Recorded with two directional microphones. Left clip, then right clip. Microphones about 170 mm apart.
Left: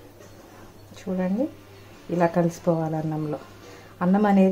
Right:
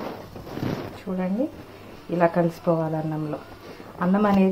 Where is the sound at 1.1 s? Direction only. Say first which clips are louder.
Left 1 dB; 5° left (ahead or behind).